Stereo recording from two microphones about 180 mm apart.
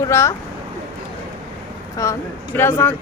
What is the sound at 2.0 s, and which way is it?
Speech, 15° left (ahead or behind).